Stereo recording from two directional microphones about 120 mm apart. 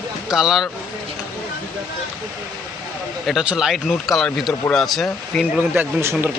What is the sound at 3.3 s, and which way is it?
Speech, 5° right (ahead or behind).